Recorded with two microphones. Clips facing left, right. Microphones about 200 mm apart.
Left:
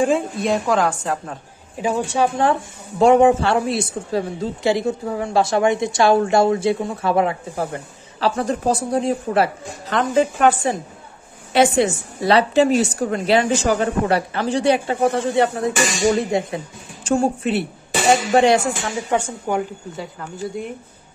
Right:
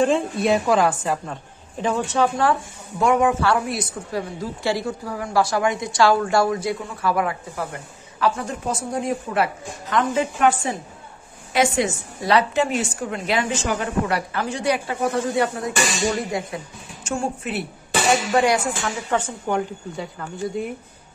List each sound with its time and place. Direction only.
0.4 s a woman's voice: 5° right (ahead or behind); by 2.5 s 20° left (ahead or behind)
3.0 s a woman's voice: 30° left (ahead or behind)
19.0 s a woman's voice: 15° left (ahead or behind)